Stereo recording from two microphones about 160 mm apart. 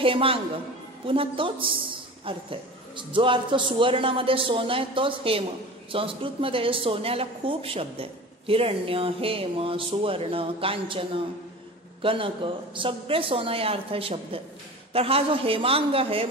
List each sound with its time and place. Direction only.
0.0 s music: 35° right (ahead or behind)
1.0 s a woman's voice: 35° right (ahead or behind)